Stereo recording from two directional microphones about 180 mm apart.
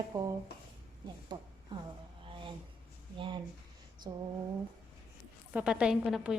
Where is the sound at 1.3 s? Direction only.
25° right (ahead or behind).